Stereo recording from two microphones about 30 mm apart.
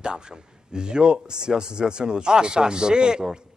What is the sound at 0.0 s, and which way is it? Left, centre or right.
Speech, right.